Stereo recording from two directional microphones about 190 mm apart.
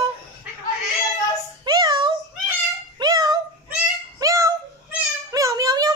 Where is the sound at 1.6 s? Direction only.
20° right (ahead or behind).